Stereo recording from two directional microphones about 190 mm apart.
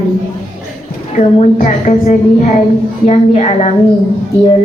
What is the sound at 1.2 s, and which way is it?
A woman's voice, 35° left (ahead or behind).